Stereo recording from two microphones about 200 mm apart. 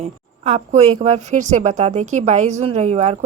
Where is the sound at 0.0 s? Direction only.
30° right (ahead or behind).